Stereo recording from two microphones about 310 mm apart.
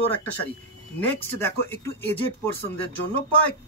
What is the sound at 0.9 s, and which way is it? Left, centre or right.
Speech, centre.